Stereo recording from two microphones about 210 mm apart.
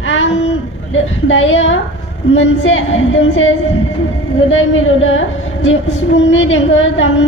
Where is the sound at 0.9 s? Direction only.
65° left (ahead or behind).